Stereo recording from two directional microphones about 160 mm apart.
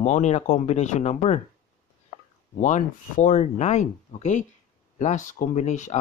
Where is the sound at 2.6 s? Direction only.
55° left (ahead or behind).